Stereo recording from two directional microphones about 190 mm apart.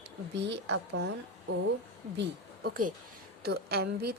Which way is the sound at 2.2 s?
50° right (ahead or behind).